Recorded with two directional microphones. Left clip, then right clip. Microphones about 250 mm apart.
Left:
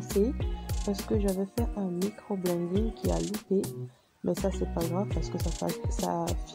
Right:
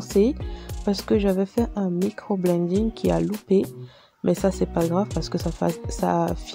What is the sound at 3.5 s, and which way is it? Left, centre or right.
Speech, right.